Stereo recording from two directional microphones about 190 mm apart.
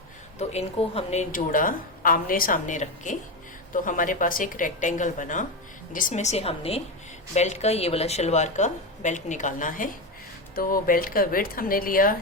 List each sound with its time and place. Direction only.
0.3 s a woman's voice: 35° left (ahead or behind)